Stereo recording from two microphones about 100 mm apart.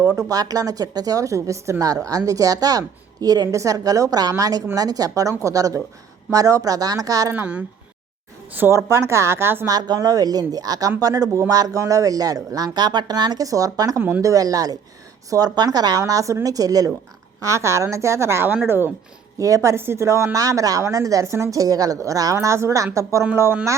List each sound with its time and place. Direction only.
0.0 s a woman's voice: 35° right (ahead or behind)
7.3 s speech: 15° right (ahead or behind)
8.5 s a woman's voice: 25° right (ahead or behind)
9.6 s a woman's voice: 40° right (ahead or behind); by 18.9 s 25° right (ahead or behind)
19.4 s a woman's voice: 35° right (ahead or behind)